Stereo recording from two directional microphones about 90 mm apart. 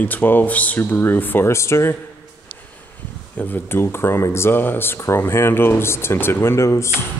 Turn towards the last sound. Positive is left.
turn(degrees=30)  # may be behind; listen again after turning